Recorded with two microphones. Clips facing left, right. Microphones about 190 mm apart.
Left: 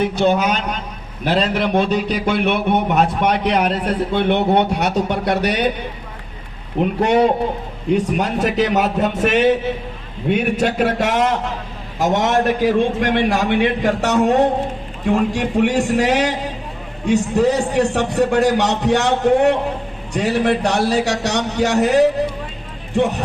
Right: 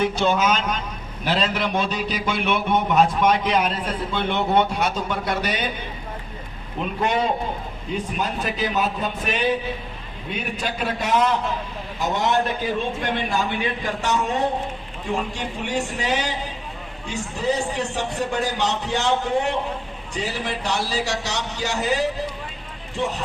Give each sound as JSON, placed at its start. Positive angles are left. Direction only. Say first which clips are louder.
{"t": 0.0, "sound": "a man's voice", "louder": "left 4 dB", "side_deg": 60}
{"t": 1.5, "sound": "a man's voice", "louder": "left 7 dB", "side_deg": 60}
{"t": 6.8, "sound": "a man's voice", "louder": "left 7 dB", "side_deg": 70}